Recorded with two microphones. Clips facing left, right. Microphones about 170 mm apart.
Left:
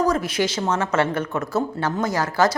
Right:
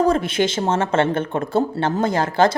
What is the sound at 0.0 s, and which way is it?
A woman's voice, 25° right (ahead or behind).